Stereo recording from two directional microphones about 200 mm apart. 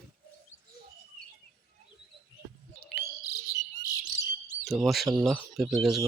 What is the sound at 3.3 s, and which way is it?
Bird, 15° left (ahead or behind).